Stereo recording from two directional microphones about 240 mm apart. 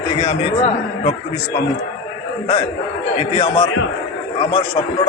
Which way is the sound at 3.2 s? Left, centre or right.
Left.